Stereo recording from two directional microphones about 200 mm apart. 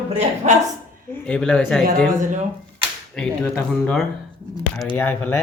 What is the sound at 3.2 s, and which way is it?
Speech, 5° left (ahead or behind).